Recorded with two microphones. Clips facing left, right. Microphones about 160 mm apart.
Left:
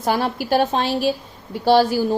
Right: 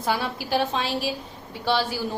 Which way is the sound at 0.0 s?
45° left (ahead or behind).